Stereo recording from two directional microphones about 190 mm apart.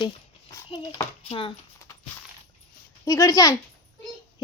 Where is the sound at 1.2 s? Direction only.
30° left (ahead or behind).